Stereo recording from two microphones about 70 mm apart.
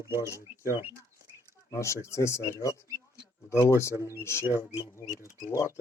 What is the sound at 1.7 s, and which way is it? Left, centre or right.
Speech, left.